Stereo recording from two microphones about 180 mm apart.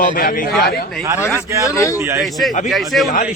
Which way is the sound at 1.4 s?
15° right (ahead or behind).